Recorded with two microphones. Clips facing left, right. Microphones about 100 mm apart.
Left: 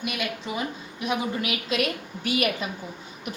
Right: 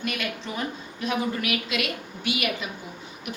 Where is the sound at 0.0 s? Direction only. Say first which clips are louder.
Even; 10° left (ahead or behind).